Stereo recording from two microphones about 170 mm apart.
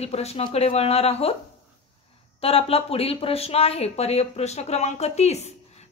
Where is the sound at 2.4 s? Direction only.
35° left (ahead or behind).